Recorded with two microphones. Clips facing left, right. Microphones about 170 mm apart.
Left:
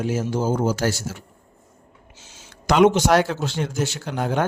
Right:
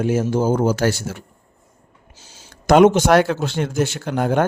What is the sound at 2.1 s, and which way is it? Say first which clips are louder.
A man's voice: right 2 dB; 35° right (ahead or behind).